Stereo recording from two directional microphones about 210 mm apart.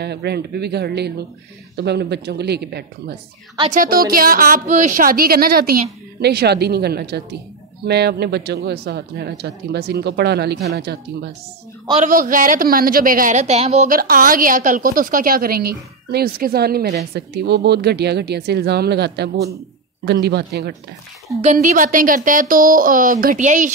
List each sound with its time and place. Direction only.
0.0 s a woman's voice: 50° right (ahead or behind)
12.0 s a woman's voice: 40° right (ahead or behind)
21.4 s speech: 35° right (ahead or behind)